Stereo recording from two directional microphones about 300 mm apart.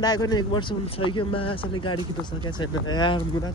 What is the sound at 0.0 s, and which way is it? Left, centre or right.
Speech, centre.